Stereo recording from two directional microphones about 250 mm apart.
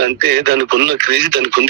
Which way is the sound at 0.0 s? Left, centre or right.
Right.